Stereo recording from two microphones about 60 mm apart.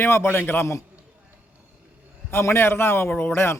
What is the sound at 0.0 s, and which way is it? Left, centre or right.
Speech, left.